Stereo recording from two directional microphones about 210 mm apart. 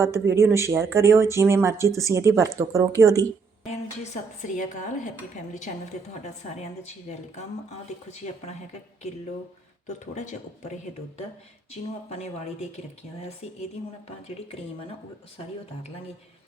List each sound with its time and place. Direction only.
0.0 s speech: 15° right (ahead or behind)
3.7 s a woman's voice: 35° left (ahead or behind)
8.1 s a woman's voice: 30° left (ahead or behind)
9.8 s a woman's voice: 35° left (ahead or behind)